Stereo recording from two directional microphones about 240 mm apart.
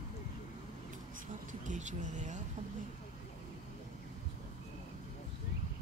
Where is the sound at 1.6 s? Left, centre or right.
Right.